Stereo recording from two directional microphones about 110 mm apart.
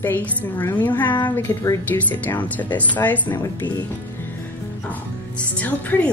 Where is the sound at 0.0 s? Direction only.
15° left (ahead or behind).